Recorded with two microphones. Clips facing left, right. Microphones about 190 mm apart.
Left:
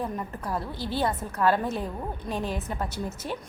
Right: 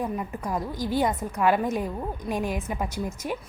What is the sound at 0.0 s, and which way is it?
A woman's voice, 15° right (ahead or behind).